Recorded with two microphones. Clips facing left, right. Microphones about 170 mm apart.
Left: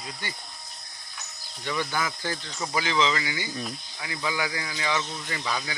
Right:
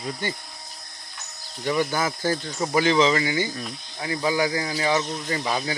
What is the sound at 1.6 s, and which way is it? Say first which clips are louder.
Speech: right 6 dB; 40° right (ahead or behind).